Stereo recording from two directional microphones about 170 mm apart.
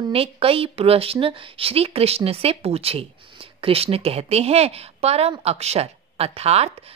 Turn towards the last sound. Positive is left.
turn(degrees=-40)  # may be behind; listen again after turning